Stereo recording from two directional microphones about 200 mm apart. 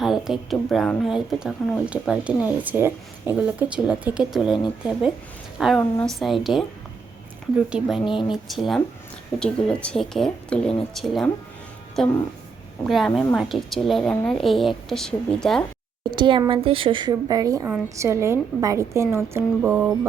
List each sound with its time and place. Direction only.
0.0 s a woman's voice: centre (ahead or behind)
7.7 s a woman's voice: 5° right (ahead or behind)
16.1 s a woman's voice: 25° right (ahead or behind)